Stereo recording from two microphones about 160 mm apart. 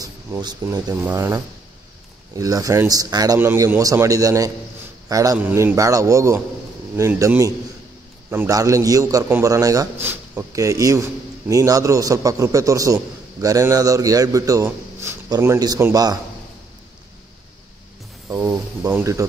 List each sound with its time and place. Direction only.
0.0 s a man's voice: 25° right (ahead or behind)
18.4 s speech: 15° right (ahead or behind)